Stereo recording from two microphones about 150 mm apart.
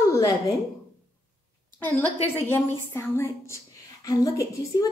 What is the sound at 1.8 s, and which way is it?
A woman's voice, 10° left (ahead or behind).